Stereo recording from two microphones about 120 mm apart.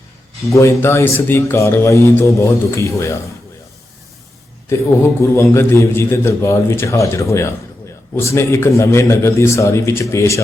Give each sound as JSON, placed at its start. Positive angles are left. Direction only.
{"t": 0.5, "sound": "speech", "side_deg": 20}
{"t": 5.3, "sound": "speech", "side_deg": 20}